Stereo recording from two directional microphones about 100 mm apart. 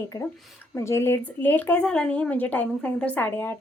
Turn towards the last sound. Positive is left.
turn(degrees=20)  # may be behind; listen again after turning